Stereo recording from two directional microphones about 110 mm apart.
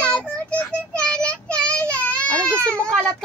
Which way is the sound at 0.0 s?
10° left (ahead or behind).